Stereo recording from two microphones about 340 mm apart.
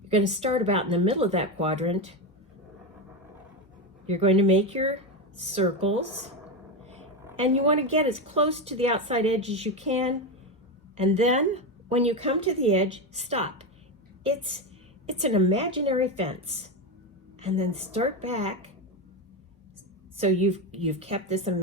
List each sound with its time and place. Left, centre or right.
0.3 s a woman's voice: centre
4.0 s a woman's voice: centre
7.4 s a woman's voice: centre
20.1 s a woman's voice: centre